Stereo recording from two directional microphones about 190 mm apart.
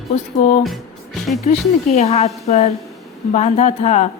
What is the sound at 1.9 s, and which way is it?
Speech, 35° left (ahead or behind).